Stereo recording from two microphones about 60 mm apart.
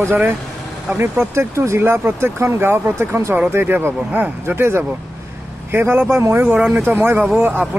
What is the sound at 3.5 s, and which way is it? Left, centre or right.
Speech, right.